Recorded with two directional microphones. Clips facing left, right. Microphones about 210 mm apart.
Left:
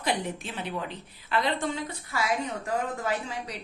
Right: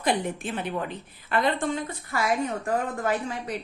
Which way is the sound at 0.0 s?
50° right (ahead or behind).